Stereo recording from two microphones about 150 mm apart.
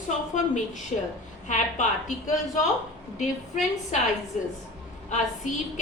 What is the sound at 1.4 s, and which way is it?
Speech, 55° left (ahead or behind).